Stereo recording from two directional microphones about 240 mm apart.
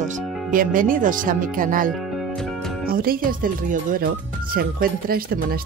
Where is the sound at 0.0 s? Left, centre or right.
Right.